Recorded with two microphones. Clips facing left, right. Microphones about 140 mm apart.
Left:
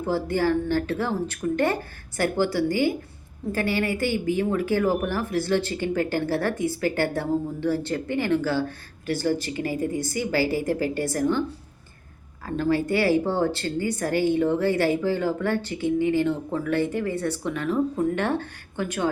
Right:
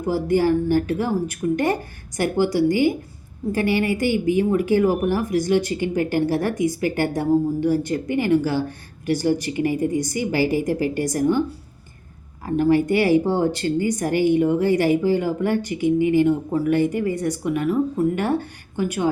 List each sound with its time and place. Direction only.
0.0 s speech: 15° right (ahead or behind)
12.5 s speech: 15° right (ahead or behind)